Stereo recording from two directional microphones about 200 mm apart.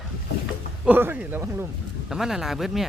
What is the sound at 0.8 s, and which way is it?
Speech, 10° right (ahead or behind).